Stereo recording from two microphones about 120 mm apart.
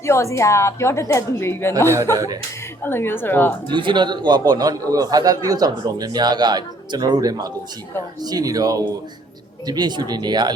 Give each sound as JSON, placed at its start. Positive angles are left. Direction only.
{"t": 0.0, "sound": "speech", "side_deg": 25}
{"t": 2.1, "sound": "a man's voice", "side_deg": -30}
{"t": 2.8, "sound": "speech", "side_deg": 20}
{"t": 3.7, "sound": "a man's voice", "side_deg": -40}